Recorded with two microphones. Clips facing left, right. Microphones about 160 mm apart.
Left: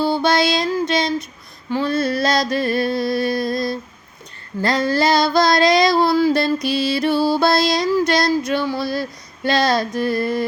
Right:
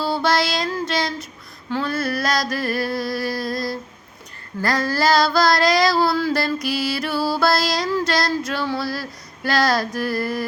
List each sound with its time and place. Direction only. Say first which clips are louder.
0.0 s child singing: left 3 dB; 20° left (ahead or behind)